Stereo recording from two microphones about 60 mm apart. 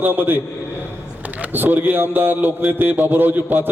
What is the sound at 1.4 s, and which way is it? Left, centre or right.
A man's voice, right.